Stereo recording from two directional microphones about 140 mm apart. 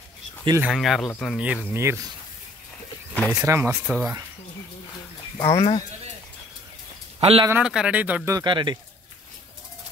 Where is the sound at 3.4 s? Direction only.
15° right (ahead or behind).